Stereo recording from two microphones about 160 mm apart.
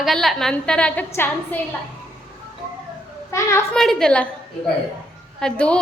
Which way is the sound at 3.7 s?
5° left (ahead or behind).